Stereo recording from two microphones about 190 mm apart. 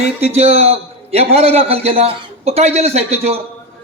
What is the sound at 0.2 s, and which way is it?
A man's voice, 35° right (ahead or behind).